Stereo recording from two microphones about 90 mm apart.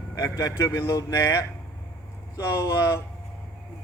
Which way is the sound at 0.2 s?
35° left (ahead or behind).